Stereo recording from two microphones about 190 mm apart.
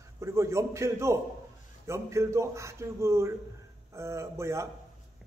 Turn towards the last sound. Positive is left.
turn(degrees=-15)  # may be behind; listen again after turning